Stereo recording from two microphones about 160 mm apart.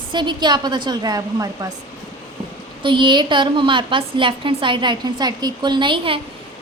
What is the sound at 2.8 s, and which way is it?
A woman's voice, 30° right (ahead or behind).